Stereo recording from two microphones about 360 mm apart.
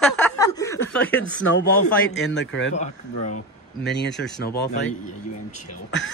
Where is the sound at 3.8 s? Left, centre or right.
Left.